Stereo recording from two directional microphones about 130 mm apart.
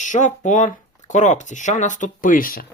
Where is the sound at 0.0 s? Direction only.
70° left (ahead or behind).